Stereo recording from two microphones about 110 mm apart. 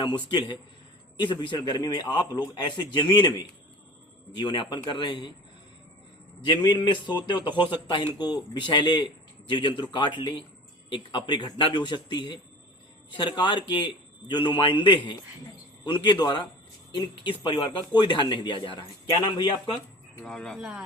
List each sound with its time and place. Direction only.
0.0 s a man's voice: 40° left (ahead or behind)
6.4 s a man's voice: 40° left (ahead or behind)
20.2 s speech: 5° left (ahead or behind)